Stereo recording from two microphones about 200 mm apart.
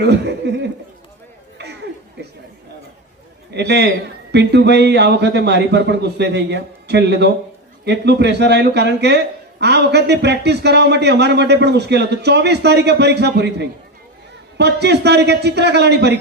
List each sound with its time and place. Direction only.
0.0 s speech: 55° right (ahead or behind)
1.5 s a sound: 55° right (ahead or behind)
3.5 s speech: 55° right (ahead or behind)